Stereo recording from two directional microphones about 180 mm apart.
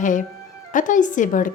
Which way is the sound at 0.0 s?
45° left (ahead or behind).